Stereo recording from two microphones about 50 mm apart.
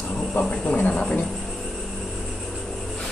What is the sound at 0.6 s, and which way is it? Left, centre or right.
Speech, left.